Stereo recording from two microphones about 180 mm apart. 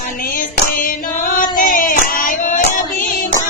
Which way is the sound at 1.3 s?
50° left (ahead or behind).